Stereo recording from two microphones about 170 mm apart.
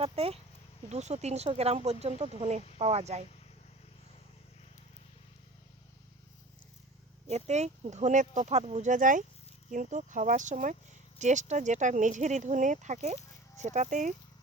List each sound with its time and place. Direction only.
0.0 s speech: 35° right (ahead or behind)
7.3 s speech: 40° right (ahead or behind)